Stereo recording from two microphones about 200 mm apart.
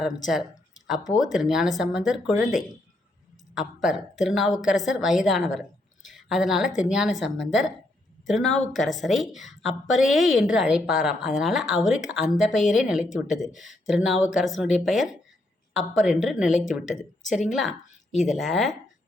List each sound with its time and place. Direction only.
0.0 s a woman's voice: centre (ahead or behind)